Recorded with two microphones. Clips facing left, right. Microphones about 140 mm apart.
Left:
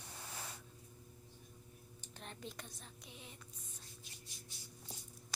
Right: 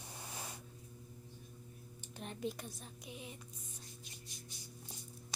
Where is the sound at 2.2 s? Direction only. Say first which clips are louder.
Right 8 dB; 15° right (ahead or behind).